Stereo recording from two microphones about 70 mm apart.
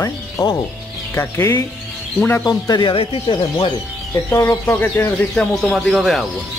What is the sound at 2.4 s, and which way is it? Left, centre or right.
Speech, left.